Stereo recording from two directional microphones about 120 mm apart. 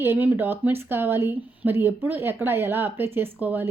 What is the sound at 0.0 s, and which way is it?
A woman's voice, 20° right (ahead or behind).